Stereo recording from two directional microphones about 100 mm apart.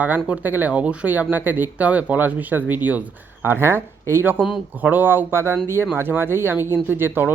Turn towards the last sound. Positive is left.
turn(degrees=-20)  # may be behind; listen again after turning